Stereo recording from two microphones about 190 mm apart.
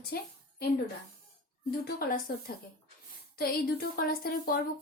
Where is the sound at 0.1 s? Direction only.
55° left (ahead or behind).